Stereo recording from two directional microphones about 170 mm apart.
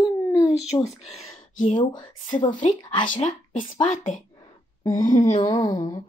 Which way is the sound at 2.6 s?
50° left (ahead or behind).